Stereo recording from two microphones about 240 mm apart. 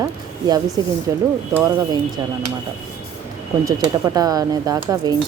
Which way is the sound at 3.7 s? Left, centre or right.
Centre.